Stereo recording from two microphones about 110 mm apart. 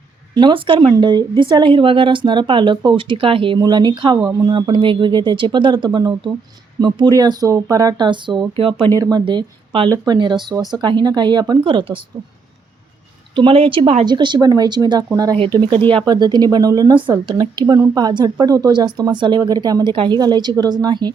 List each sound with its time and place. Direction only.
0.3 s speech: 45° right (ahead or behind)
3.6 s a woman's voice: 40° right (ahead or behind)
4.5 s a woman's voice: 45° right (ahead or behind)
8.5 s speech: 55° right (ahead or behind)
8.9 s a woman's voice: 35° right (ahead or behind)
13.3 s speech: 55° right (ahead or behind)
14.0 s a woman's voice: 40° right (ahead or behind)